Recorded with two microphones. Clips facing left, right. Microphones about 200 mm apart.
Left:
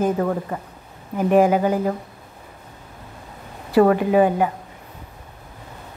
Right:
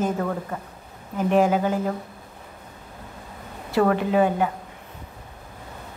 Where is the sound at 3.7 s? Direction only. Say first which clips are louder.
Left 5 dB; 15° left (ahead or behind).